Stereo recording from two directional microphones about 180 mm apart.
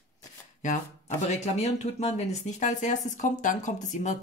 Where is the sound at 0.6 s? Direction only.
40° left (ahead or behind).